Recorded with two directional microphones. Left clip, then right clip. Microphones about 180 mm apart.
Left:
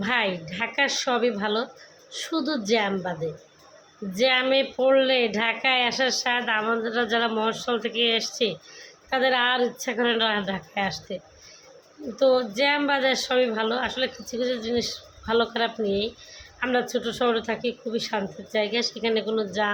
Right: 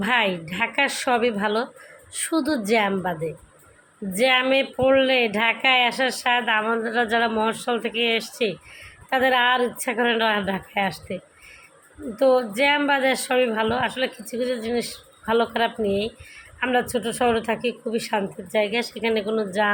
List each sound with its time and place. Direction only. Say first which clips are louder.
0.0 s a woman's voice: right 3 dB; 15° right (ahead or behind)